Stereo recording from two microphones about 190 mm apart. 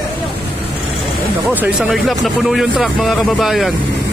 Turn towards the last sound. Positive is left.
turn(degrees=0)  # may be behind; listen again after turning